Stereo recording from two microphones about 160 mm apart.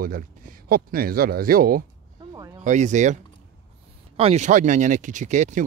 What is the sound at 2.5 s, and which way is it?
Speech, 50° right (ahead or behind).